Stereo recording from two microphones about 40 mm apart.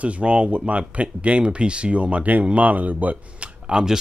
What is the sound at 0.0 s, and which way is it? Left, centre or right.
Speech, right.